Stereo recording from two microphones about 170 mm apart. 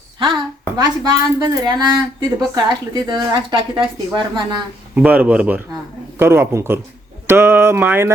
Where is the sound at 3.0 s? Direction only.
25° right (ahead or behind).